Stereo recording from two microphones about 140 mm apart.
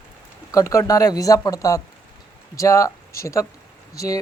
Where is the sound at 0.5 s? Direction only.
20° left (ahead or behind).